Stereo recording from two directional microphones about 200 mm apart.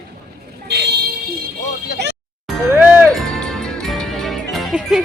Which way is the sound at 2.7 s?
10° right (ahead or behind).